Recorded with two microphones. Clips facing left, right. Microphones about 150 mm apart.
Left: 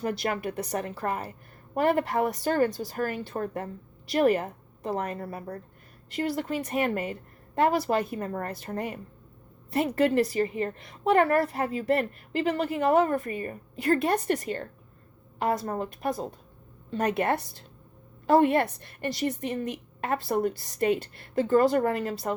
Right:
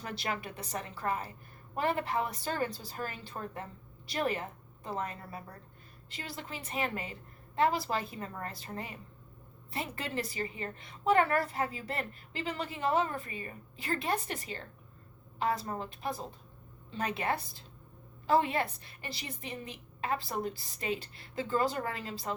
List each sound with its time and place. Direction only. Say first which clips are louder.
0.0 s a woman's voice: left 8 dB; 45° left (ahead or behind)
9.7 s a woman's voice: left 13 dB; 60° left (ahead or behind)